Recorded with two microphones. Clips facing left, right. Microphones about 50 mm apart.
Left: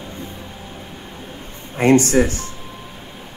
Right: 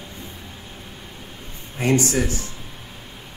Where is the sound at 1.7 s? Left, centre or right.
Left.